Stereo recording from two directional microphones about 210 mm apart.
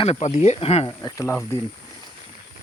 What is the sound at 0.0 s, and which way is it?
Speech, 30° left (ahead or behind).